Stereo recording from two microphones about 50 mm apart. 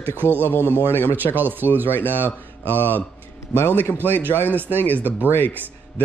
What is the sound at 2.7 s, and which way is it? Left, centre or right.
A man's voice, left.